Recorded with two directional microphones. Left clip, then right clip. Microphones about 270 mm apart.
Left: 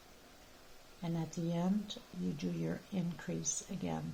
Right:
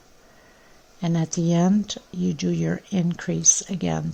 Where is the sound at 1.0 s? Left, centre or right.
Right.